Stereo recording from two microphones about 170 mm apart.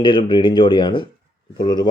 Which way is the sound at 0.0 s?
30° left (ahead or behind).